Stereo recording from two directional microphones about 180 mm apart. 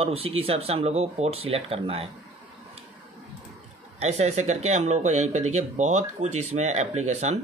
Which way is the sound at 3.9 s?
35° right (ahead or behind).